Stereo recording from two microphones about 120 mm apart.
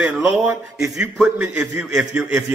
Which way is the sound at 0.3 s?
Centre (ahead or behind).